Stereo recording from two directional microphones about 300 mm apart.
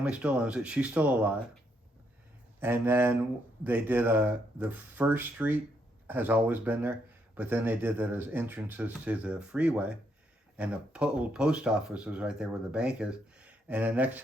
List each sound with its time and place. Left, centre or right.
0.0 s speech: centre
2.6 s speech: centre